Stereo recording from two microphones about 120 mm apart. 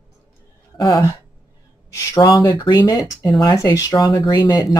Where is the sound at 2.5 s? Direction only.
40° left (ahead or behind).